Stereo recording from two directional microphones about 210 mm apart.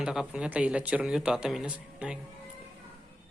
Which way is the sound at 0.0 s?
5° right (ahead or behind).